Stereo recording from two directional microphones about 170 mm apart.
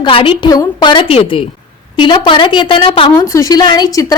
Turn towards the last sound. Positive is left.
turn(degrees=20)  # may be behind; listen again after turning